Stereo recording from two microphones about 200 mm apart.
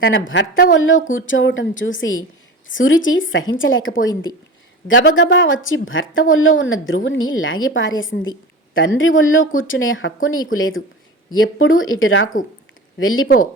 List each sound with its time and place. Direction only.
0.0 s a woman's voice: 70° left (ahead or behind); by 7.7 s 90° left
7.8 s a woman's voice: 75° left (ahead or behind); by 13.2 s 90° left
13.2 s speech: 45° left (ahead or behind)